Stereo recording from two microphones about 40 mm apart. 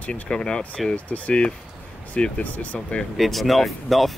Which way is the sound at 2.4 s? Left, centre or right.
Left.